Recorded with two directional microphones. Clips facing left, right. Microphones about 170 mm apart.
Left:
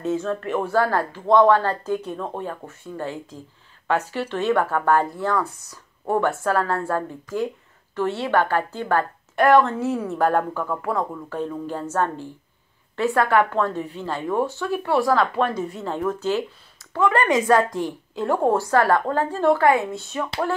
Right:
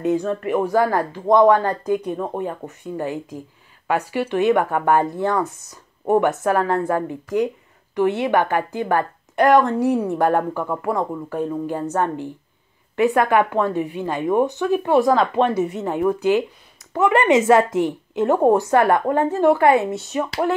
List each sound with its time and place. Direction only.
0.0 s a woman's voice: 15° right (ahead or behind)
19.9 s speech: 75° right (ahead or behind)
20.2 s speech: 15° right (ahead or behind)